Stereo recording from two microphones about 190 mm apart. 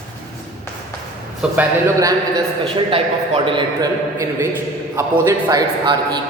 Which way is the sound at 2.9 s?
30° right (ahead or behind).